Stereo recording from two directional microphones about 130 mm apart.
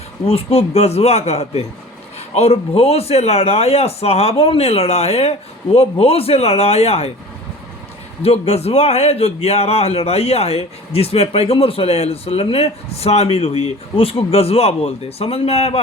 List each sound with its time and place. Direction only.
0.3 s a man's voice: 50° left (ahead or behind)
8.2 s a man's voice: 50° left (ahead or behind)